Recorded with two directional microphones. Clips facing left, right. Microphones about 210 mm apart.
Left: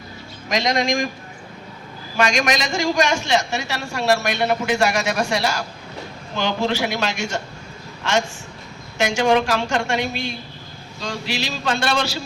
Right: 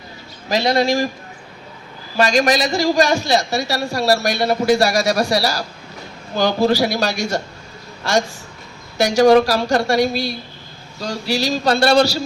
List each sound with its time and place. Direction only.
0.4 s a man's voice: 35° right (ahead or behind)
2.1 s a man's voice: 35° right (ahead or behind)
9.0 s a man's voice: 40° right (ahead or behind)